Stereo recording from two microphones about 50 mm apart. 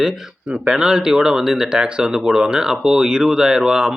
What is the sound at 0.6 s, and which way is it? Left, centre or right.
Speech, centre.